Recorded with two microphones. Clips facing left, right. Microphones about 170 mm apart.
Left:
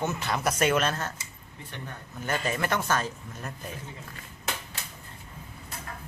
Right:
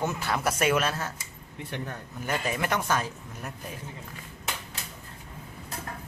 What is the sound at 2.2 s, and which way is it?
Speech, 10° right (ahead or behind).